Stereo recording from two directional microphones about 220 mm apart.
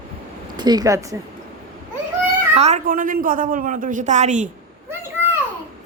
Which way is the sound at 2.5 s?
30° right (ahead or behind).